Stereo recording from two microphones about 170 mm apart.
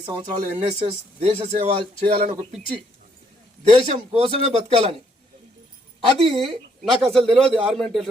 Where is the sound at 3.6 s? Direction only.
35° right (ahead or behind).